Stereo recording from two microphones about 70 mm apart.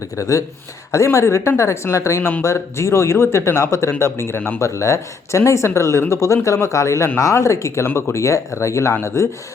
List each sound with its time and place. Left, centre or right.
0.2 s speech: left
7.9 s speech: left
8.1 s speech: left